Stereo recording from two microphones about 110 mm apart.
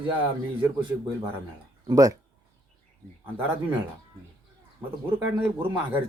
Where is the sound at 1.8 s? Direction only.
30° right (ahead or behind).